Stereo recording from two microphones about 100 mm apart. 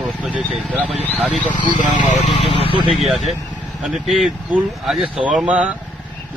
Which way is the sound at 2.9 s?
Centre (ahead or behind).